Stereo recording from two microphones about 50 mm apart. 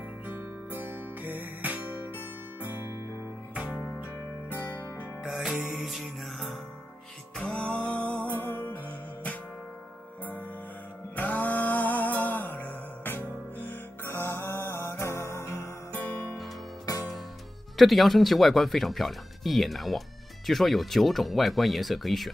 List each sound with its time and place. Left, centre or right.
0.3 s music: right
4.5 s music: left
5.2 s music: centre
7.3 s music: left
8.3 s music: left
11.1 s music: left
15.9 s music: left
17.7 s speech: centre